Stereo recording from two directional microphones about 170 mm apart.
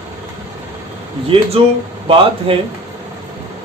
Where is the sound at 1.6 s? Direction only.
35° right (ahead or behind).